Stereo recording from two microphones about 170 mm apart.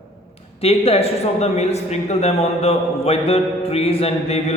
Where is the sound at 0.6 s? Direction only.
35° left (ahead or behind).